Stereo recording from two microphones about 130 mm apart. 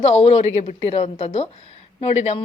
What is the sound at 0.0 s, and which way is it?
Speech, 50° left (ahead or behind).